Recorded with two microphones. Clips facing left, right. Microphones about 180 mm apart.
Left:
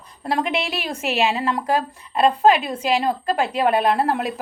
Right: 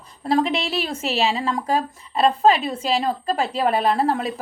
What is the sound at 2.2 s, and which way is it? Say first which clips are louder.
A woman's voice: left 1 dB; 5° left (ahead or behind).